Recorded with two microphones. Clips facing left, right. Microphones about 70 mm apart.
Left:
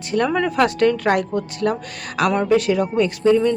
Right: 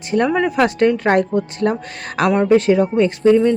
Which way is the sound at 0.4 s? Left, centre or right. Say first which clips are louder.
Right 2 dB; right.